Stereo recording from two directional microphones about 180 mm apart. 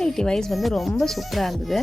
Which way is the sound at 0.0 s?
5° left (ahead or behind).